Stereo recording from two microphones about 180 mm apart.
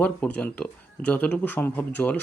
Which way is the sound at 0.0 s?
10° left (ahead or behind).